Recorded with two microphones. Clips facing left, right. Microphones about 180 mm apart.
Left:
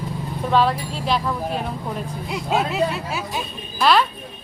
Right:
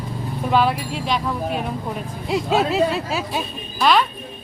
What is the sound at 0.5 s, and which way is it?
Speech, 5° right (ahead or behind).